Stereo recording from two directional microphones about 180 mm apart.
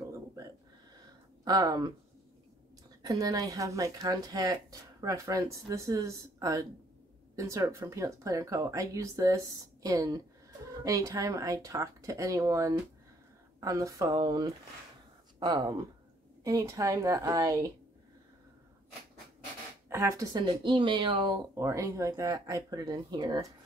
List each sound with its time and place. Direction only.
1.4 s speech: 20° right (ahead or behind)
3.0 s speech: 20° right (ahead or behind)
15.3 s a sound: 25° right (ahead or behind)
16.4 s speech: 20° right (ahead or behind)
19.9 s speech: 15° right (ahead or behind)